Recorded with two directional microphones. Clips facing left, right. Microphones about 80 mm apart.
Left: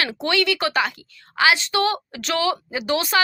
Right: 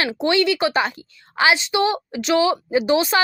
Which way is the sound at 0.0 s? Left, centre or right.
Right.